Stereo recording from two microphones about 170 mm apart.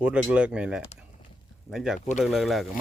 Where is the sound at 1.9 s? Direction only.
45° left (ahead or behind).